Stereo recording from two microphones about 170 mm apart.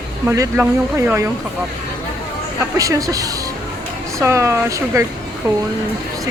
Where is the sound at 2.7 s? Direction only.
20° right (ahead or behind).